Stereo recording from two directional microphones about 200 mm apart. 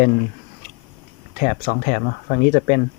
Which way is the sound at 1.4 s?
40° left (ahead or behind).